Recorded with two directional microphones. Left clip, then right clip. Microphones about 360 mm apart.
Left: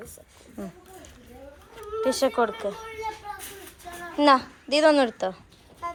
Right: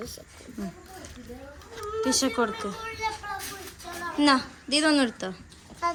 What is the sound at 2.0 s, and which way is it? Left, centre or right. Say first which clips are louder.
Speech: left 3 dB; centre.